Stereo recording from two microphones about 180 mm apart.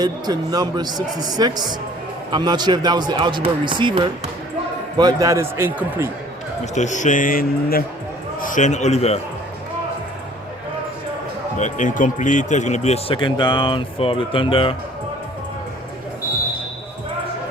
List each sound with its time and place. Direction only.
0.0 s speech: 20° right (ahead or behind)
6.7 s speech: 40° left (ahead or behind)
11.5 s speech: 45° left (ahead or behind)